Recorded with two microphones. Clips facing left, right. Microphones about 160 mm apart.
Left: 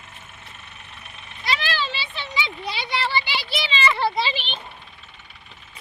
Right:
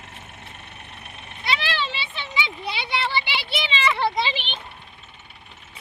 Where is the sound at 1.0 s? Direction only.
60° right (ahead or behind).